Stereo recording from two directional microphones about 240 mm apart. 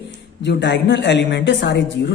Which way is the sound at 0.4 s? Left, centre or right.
Left.